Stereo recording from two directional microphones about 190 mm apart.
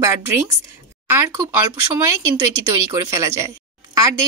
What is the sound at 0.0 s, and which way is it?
Speech, 15° right (ahead or behind).